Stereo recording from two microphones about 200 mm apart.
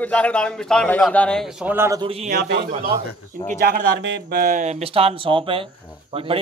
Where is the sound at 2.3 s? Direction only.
45° right (ahead or behind).